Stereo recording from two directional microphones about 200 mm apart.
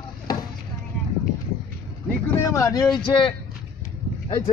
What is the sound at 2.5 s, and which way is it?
A man's voice, 15° left (ahead or behind).